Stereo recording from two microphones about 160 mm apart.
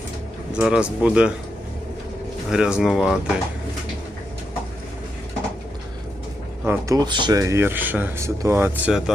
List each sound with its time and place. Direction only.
0.5 s speech: 5° right (ahead or behind)
2.5 s speech: 5° right (ahead or behind)
6.7 s speech: 20° right (ahead or behind)